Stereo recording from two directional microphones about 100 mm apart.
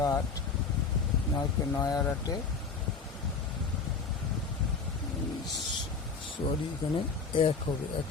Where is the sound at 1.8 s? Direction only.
40° left (ahead or behind).